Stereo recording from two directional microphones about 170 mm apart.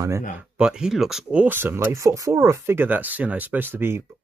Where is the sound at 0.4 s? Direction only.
5° right (ahead or behind).